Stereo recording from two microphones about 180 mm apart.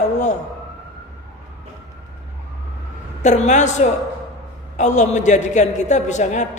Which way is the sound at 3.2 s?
40° left (ahead or behind).